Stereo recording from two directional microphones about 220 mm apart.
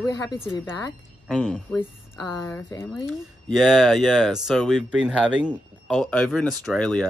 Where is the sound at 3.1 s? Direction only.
Centre (ahead or behind).